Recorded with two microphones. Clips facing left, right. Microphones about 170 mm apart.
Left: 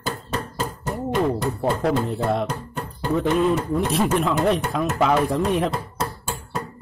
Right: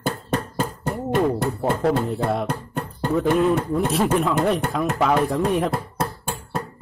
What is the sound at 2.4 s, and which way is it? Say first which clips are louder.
Music: even; 60° right (ahead or behind).